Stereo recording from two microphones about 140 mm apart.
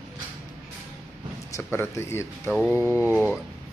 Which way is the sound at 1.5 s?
15° left (ahead or behind).